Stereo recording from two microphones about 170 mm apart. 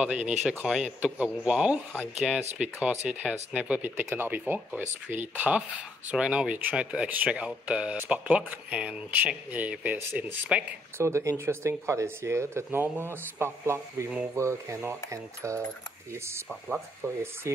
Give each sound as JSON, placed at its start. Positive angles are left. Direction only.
{"t": 0.4, "sound": "speech", "side_deg": -5}